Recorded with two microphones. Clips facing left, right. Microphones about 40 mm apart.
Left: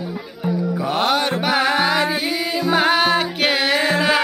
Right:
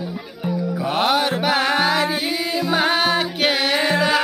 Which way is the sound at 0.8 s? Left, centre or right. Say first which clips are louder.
Right 1 dB; centre.